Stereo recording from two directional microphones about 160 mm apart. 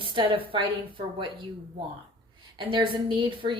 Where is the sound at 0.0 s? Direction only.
30° right (ahead or behind).